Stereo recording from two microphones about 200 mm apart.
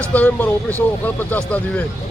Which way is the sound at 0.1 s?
10° left (ahead or behind).